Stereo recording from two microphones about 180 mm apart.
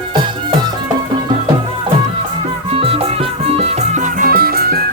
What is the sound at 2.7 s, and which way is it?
Music, 30° right (ahead or behind).